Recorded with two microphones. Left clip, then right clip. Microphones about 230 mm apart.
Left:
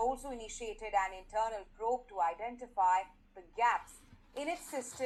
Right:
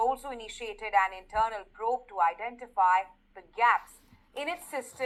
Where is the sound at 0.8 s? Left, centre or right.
Centre.